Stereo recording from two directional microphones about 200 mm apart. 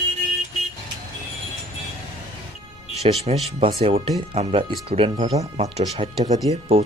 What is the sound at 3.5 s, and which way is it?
Speech, 30° right (ahead or behind).